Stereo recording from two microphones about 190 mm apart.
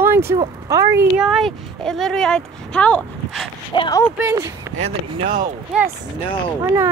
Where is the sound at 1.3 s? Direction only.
Centre (ahead or behind).